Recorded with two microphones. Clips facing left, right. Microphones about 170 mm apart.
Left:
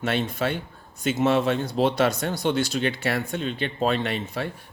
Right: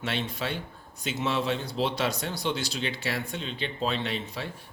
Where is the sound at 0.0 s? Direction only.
50° left (ahead or behind).